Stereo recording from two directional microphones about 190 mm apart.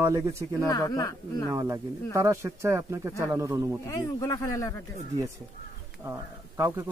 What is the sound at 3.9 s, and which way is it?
Speech, 15° left (ahead or behind).